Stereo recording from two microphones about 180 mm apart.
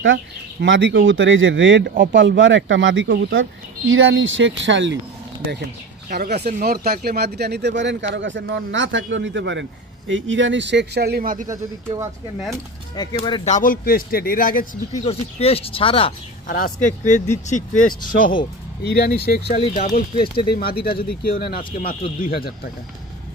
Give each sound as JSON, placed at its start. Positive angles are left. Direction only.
{"t": 0.0, "sound": "speech", "side_deg": -90}
{"t": 6.1, "sound": "speech", "side_deg": -65}
{"t": 11.4, "sound": "speech", "side_deg": -20}
{"t": 12.9, "sound": "speech", "side_deg": 25}
{"t": 13.4, "sound": "speech", "side_deg": 45}
{"t": 15.0, "sound": "speech", "side_deg": 35}
{"t": 16.4, "sound": "speech", "side_deg": 50}
{"t": 19.5, "sound": "speech", "side_deg": 35}
{"t": 20.5, "sound": "speech", "side_deg": 60}